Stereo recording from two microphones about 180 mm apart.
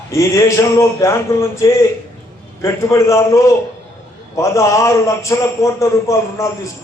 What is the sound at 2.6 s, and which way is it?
A man's voice, 15° left (ahead or behind).